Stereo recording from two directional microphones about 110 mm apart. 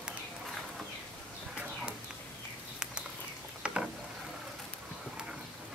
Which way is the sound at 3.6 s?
10° right (ahead or behind).